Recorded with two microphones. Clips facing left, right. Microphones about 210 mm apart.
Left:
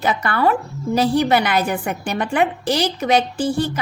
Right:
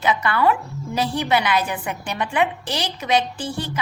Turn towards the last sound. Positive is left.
turn(degrees=45)  # may be behind; listen again after turning